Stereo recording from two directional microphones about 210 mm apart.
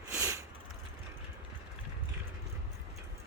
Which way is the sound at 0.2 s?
15° right (ahead or behind).